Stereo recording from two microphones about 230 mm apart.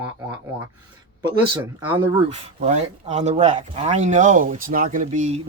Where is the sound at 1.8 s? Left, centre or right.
Centre.